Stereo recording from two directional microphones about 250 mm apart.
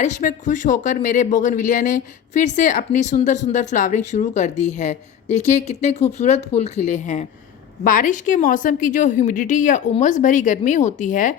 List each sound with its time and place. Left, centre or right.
0.0 s a woman's voice: left